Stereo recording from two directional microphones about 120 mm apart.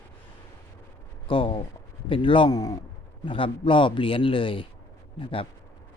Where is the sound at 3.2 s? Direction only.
45° left (ahead or behind).